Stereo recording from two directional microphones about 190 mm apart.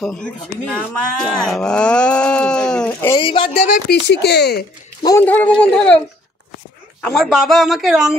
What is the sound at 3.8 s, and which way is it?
Speech, 65° left (ahead or behind).